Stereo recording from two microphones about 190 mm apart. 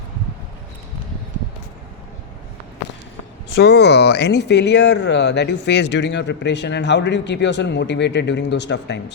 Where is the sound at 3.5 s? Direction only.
60° left (ahead or behind).